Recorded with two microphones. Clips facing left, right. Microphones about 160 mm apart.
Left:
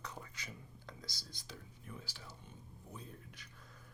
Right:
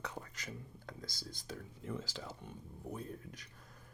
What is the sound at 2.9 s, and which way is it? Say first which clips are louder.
Speech: right 6 dB; 40° right (ahead or behind).